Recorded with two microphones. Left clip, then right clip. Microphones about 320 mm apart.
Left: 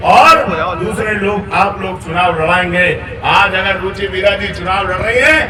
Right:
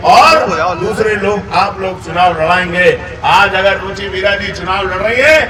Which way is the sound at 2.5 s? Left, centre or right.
Right.